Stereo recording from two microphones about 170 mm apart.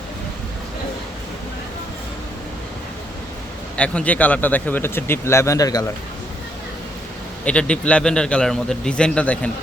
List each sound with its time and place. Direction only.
3.8 s speech: 5° left (ahead or behind)
7.4 s a man's voice: 5° left (ahead or behind)